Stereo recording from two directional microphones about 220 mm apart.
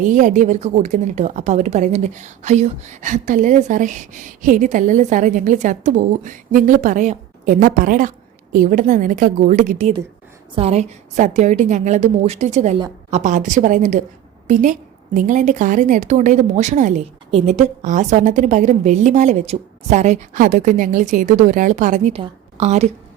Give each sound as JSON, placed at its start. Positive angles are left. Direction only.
{"t": 0.0, "sound": "a woman's voice", "side_deg": -35}